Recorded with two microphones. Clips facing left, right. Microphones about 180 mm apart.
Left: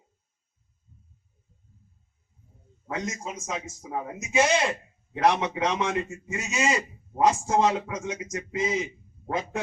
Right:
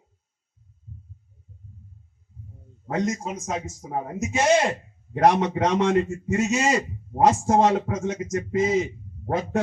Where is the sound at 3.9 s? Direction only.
40° right (ahead or behind).